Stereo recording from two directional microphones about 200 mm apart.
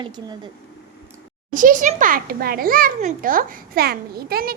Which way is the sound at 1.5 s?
40° right (ahead or behind).